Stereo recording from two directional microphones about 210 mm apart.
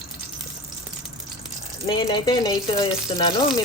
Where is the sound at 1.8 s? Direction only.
20° left (ahead or behind).